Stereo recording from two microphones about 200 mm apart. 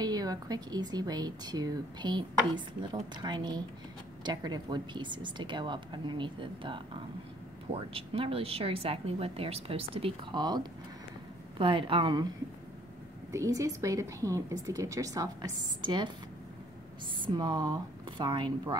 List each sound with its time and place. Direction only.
0.0 s speech: 20° right (ahead or behind)
13.3 s a woman's voice: 15° right (ahead or behind)
17.2 s speech: 20° right (ahead or behind)